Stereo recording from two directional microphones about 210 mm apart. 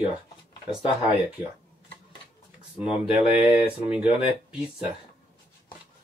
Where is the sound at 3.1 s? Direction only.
25° left (ahead or behind).